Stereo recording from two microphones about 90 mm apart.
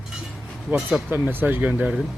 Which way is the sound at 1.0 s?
20° right (ahead or behind).